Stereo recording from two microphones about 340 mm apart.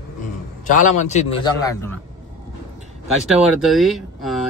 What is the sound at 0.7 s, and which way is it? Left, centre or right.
A man's voice, left.